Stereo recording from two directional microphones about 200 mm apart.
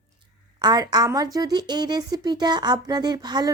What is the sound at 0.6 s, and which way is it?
A woman's voice, 20° right (ahead or behind).